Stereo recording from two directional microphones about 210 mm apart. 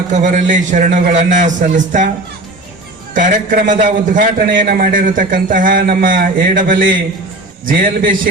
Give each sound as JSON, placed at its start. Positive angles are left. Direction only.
{"t": 0.1, "sound": "a man's voice", "side_deg": -35}
{"t": 3.2, "sound": "a man's voice", "side_deg": -40}